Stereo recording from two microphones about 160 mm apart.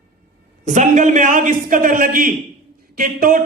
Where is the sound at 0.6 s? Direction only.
50° right (ahead or behind).